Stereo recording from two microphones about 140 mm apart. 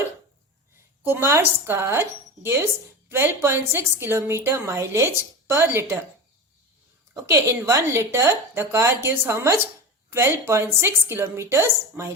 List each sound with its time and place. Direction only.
1.0 s a woman's voice: 15° right (ahead or behind)
7.3 s speech: 20° right (ahead or behind)